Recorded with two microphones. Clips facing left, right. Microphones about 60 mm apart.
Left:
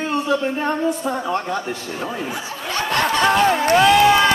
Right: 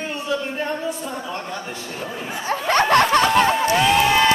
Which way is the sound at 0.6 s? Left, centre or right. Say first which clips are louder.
Left 5 dB; left.